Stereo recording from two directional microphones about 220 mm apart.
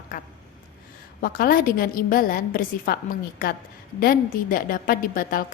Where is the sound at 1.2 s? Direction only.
40° left (ahead or behind).